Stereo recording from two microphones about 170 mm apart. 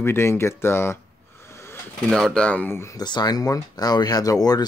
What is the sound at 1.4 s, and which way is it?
Snake, 15° left (ahead or behind).